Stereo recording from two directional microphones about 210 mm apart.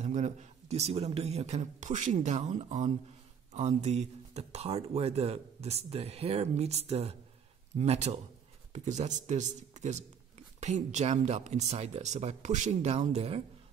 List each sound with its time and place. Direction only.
0.0 s speech: 35° right (ahead or behind)